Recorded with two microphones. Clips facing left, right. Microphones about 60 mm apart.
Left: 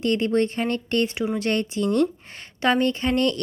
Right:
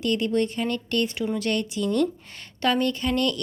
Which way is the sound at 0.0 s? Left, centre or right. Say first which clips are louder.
Left 2 dB; left.